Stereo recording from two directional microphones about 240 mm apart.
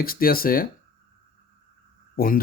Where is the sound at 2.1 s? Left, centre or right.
Left.